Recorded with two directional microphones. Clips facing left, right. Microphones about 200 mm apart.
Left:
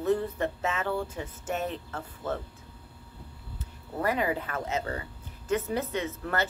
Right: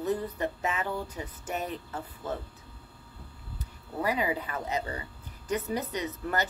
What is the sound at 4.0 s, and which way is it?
Speech, 10° right (ahead or behind).